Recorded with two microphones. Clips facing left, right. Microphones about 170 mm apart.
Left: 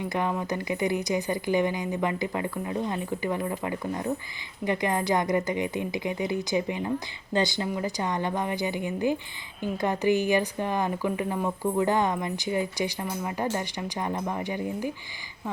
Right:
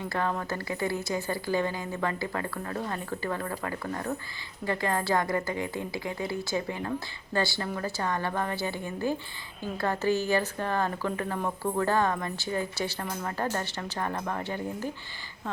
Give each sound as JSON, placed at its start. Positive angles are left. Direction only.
{"t": 0.0, "sound": "a woman's voice", "side_deg": 15}